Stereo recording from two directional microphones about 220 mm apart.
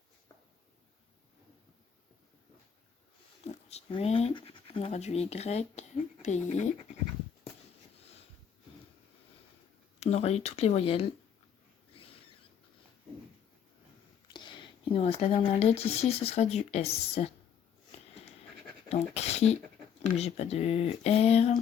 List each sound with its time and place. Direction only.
3.4 s speech: 30° left (ahead or behind)
10.0 s speech: 30° left (ahead or behind)
14.3 s speech: 20° left (ahead or behind)
18.9 s speech: 30° left (ahead or behind)